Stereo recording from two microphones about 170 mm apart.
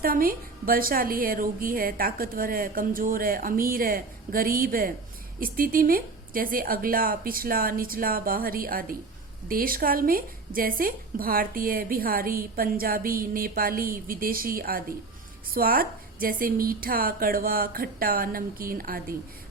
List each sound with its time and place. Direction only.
0.0 s a woman's voice: 55° right (ahead or behind)